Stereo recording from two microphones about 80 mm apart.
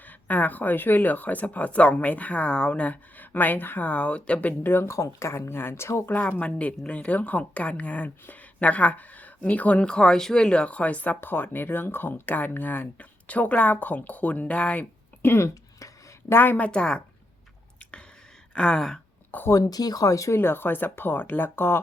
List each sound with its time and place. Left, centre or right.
0.3 s a woman's voice: left
6.1 s a woman's voice: left
15.2 s a sound: left
16.3 s a woman's voice: left
18.5 s a woman's voice: centre
19.5 s speech: left
20.4 s a woman's voice: left